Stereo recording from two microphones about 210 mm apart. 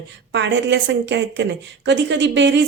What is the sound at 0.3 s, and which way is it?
A woman's voice, 55° right (ahead or behind).